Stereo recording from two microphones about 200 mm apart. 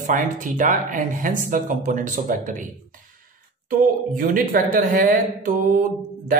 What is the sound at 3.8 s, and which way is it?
Speech, 45° right (ahead or behind).